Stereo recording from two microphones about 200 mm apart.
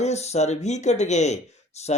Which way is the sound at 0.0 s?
35° left (ahead or behind).